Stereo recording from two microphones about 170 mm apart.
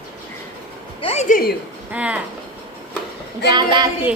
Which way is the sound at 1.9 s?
10° right (ahead or behind).